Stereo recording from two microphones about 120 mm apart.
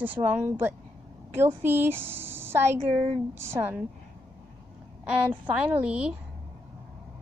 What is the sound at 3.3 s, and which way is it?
Speech, 20° right (ahead or behind).